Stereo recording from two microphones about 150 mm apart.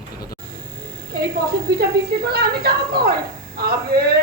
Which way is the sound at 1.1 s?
90° right.